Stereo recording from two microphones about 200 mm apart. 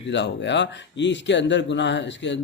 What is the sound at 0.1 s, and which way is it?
Speech, 60° left (ahead or behind).